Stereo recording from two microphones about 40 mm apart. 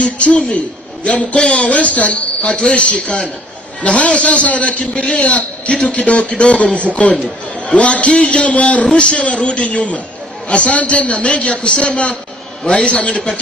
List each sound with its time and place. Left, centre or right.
0.0 s a man's voice: left